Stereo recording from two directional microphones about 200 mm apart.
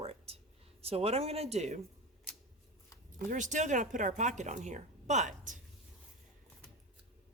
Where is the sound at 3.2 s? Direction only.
40° right (ahead or behind).